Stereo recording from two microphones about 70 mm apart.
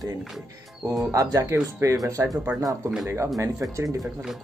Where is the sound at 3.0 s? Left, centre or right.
Right.